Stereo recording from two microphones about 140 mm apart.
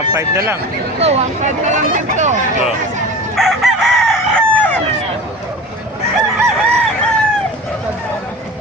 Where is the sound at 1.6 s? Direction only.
60° right (ahead or behind).